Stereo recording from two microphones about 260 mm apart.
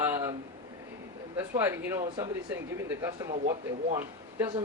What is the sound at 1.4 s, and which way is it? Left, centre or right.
Speech, centre.